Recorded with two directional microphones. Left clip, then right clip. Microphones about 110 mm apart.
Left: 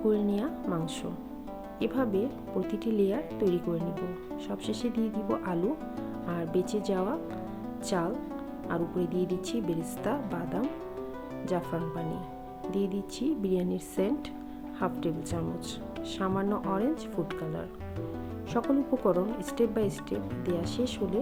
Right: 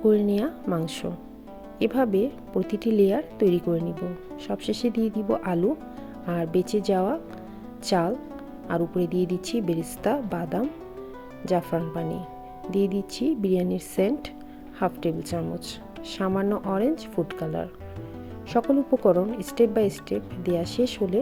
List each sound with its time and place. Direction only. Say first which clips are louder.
0.1 s speech: right 7 dB; 55° right (ahead or behind)
1.8 s speech: right 7 dB; 50° right (ahead or behind)
3.8 s speech: right 4 dB; centre (ahead or behind)
4.4 s speech: right 8 dB; 45° right (ahead or behind)